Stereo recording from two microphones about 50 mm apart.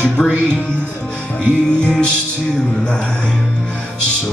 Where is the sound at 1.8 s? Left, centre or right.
Left.